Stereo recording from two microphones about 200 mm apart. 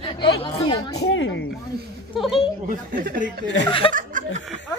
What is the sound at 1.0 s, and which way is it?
Speech, 65° left (ahead or behind).